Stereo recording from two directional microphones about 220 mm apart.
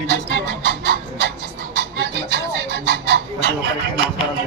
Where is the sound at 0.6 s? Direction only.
50° right (ahead or behind).